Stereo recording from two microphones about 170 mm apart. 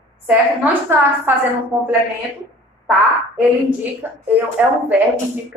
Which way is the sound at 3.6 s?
10° right (ahead or behind).